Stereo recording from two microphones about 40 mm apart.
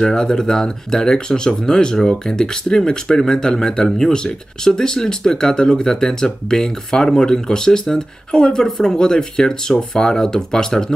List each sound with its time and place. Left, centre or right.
0.0 s speech: centre